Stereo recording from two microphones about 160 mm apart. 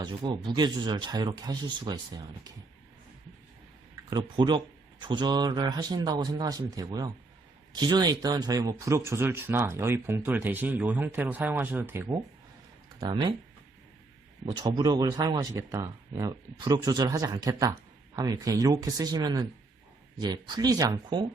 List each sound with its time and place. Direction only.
0.0 s speech: 30° right (ahead or behind)
4.1 s speech: 30° right (ahead or behind)
13.0 s speech: 30° right (ahead or behind)
14.5 s speech: 25° right (ahead or behind)